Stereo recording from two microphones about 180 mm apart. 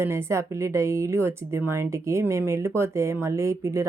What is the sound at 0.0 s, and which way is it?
Speech, 15° right (ahead or behind).